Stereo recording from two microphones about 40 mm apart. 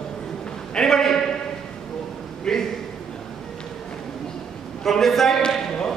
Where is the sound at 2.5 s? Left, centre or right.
Centre.